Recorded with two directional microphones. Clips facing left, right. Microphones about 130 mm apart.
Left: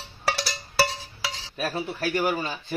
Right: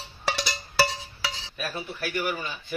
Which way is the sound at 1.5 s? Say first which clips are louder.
Left 5 dB; 35° left (ahead or behind).